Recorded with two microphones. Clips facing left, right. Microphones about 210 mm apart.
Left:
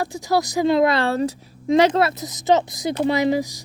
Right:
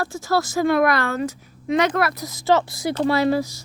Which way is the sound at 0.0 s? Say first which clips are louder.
Left 1 dB; 20° left (ahead or behind).